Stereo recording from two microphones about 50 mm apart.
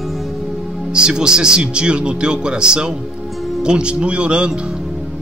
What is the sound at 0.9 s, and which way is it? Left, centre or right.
Speech, centre.